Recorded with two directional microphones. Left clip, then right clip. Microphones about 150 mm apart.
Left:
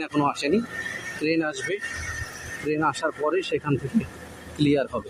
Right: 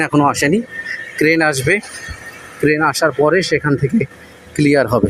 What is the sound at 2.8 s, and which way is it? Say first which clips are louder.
Speech: right 9 dB; 35° right (ahead or behind).